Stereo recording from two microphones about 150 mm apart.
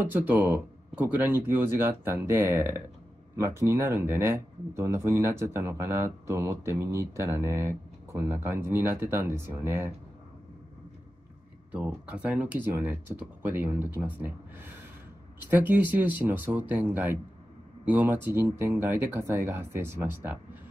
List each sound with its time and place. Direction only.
0.0 s speech: 10° right (ahead or behind)
11.7 s speech: 10° right (ahead or behind)